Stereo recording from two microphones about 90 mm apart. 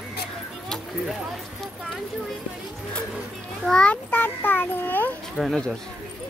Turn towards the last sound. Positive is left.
turn(degrees=5)  # may be behind; listen again after turning